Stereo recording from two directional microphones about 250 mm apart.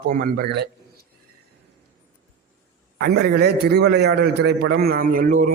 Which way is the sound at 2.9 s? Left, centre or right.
Right.